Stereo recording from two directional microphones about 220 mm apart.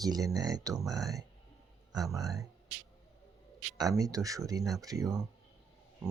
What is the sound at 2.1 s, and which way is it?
Speech, 15° right (ahead or behind).